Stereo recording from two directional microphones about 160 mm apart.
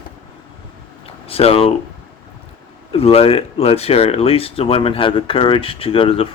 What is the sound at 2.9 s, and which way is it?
Speech, 40° left (ahead or behind).